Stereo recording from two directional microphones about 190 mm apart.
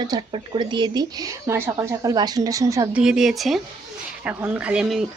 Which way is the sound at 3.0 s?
5° right (ahead or behind).